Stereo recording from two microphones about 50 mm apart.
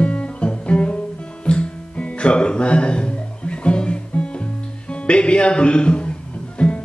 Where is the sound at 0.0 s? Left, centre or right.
Left.